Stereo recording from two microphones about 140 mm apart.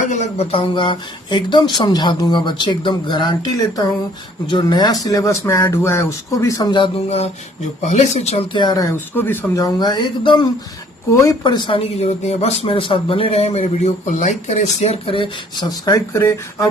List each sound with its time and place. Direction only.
0.1 s speech: 50° left (ahead or behind)
7.8 s speech: 55° left (ahead or behind)
8.5 s speech: 30° left (ahead or behind)
11.1 s speech: 25° left (ahead or behind)
16.1 s speech: 20° left (ahead or behind)